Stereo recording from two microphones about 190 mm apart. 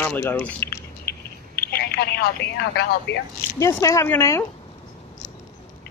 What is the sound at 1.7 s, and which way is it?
Speech, 55° left (ahead or behind).